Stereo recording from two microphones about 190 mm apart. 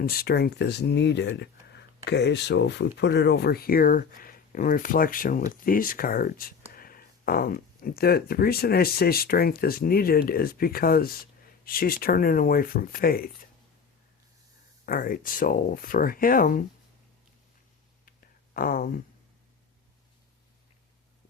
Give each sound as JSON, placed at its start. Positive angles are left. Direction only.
{"t": 0.0, "sound": "speech", "side_deg": 55}
{"t": 14.8, "sound": "speech", "side_deg": 50}
{"t": 18.5, "sound": "speech", "side_deg": 45}